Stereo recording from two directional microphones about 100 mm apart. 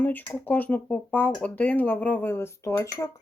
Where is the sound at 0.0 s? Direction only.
20° left (ahead or behind).